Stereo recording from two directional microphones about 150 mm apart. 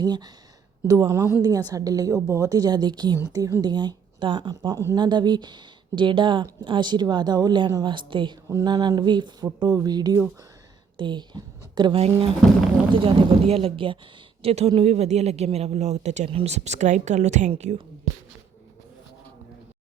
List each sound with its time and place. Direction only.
0.0 s speech: 30° right (ahead or behind)
8.4 s a woman's voice: 25° right (ahead or behind); by 17.7 s 50° right (ahead or behind)